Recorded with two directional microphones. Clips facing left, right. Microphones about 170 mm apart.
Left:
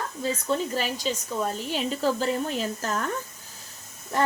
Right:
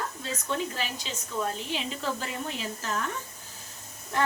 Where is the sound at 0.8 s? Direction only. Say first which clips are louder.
Left 7 dB; 45° left (ahead or behind).